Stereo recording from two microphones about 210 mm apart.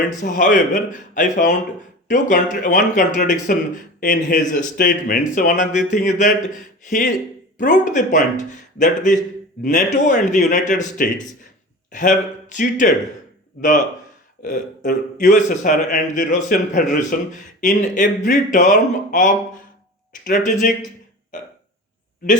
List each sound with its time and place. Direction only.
0.2 s a man's voice: 40° left (ahead or behind)